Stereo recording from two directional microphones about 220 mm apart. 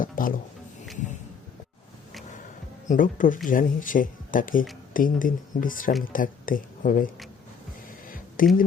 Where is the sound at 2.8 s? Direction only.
35° left (ahead or behind).